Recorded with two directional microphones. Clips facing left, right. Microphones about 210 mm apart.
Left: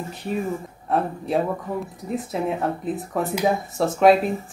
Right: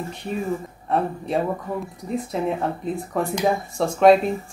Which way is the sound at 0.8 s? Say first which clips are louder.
Even; centre (ahead or behind).